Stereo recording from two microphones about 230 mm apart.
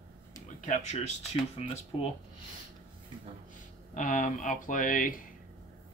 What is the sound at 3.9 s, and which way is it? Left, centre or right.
Speech, left.